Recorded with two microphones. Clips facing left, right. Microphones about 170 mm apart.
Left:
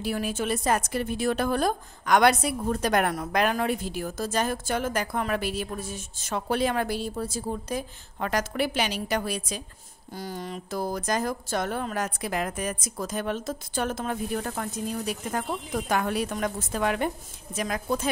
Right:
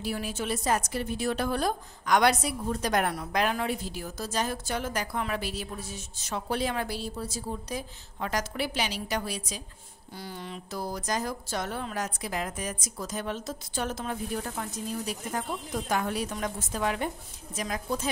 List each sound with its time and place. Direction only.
0.0 s a woman's voice: 55° left (ahead or behind)
10.1 s speech: 45° left (ahead or behind); by 18.1 s 60° left (ahead or behind)